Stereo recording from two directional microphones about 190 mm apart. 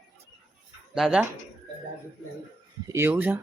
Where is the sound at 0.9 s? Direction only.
5° right (ahead or behind).